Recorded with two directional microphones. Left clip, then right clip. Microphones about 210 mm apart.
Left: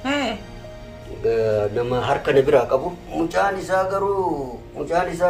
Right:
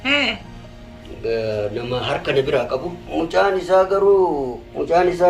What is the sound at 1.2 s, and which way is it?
Speech, 10° left (ahead or behind).